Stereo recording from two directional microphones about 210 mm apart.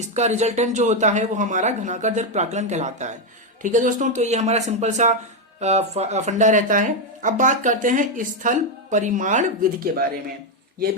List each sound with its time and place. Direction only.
0.0 s speech: 35° right (ahead or behind)